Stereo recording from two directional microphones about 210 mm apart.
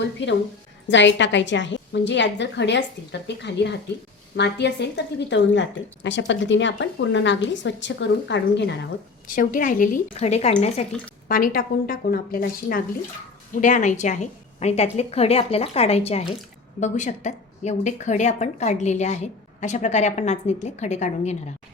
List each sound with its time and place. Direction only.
0.0 s a woman's voice: 55° left (ahead or behind); by 10.8 s 30° left (ahead or behind)
11.3 s a woman's voice: 45° left (ahead or behind)